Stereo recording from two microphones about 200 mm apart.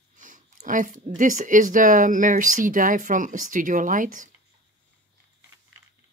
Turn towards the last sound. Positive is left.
turn(degrees=-40)  # may be behind; listen again after turning